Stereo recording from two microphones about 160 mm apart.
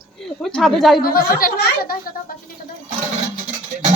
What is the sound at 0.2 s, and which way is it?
Speech, centre (ahead or behind).